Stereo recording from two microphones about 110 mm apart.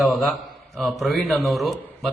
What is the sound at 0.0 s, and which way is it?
A man's voice, centre (ahead or behind).